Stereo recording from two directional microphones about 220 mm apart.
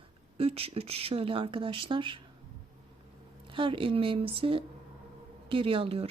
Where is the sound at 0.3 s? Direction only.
25° right (ahead or behind).